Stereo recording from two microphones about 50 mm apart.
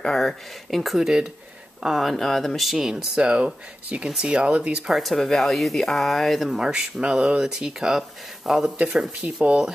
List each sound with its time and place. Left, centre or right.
0.0 s speech: centre
2.0 s speech: centre
3.2 s speech: centre
4.9 s speech: centre
6.6 s speech: centre
9.2 s speech: right